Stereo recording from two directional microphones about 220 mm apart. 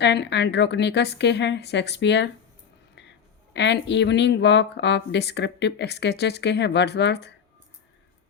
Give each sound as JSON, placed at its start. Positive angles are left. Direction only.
{"t": 0.0, "sound": "speech", "side_deg": 50}
{"t": 3.5, "sound": "speech", "side_deg": 50}